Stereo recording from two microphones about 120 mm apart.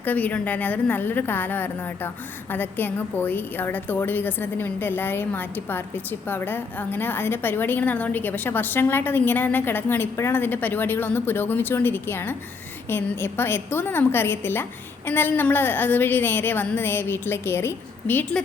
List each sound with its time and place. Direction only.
0.0 s a woman's voice: 15° left (ahead or behind)